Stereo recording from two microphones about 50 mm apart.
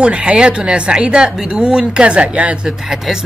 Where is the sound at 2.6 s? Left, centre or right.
Centre.